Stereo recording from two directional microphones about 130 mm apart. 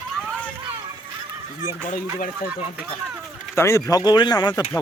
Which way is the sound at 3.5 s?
20° left (ahead or behind).